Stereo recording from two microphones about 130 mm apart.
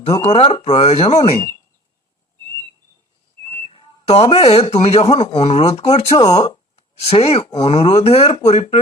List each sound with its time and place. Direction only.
0.3 s speech: 50° left (ahead or behind)
3.7 s a sound: 50° left (ahead or behind)
4.7 s speech: 50° left (ahead or behind)
6.1 s speech: 30° left (ahead or behind)
6.7 s speech: 50° left (ahead or behind)